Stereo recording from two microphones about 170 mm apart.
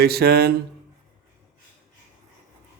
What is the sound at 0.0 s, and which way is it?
Speech, 65° right (ahead or behind).